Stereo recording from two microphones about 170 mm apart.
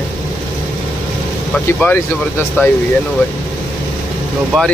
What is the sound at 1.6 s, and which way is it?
Speech, 10° left (ahead or behind).